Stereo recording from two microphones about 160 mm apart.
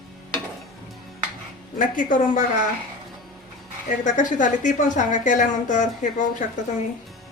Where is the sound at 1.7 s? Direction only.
55° left (ahead or behind).